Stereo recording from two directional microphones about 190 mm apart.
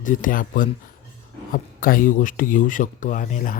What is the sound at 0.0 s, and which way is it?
Speech, 45° left (ahead or behind).